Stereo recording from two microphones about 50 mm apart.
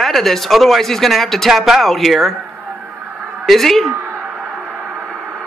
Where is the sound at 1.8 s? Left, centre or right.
Centre.